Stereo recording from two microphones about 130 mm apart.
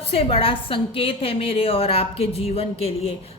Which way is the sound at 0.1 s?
45° left (ahead or behind).